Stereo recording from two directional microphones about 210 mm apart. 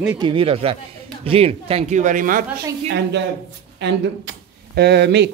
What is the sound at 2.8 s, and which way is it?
A woman's voice, 55° right (ahead or behind).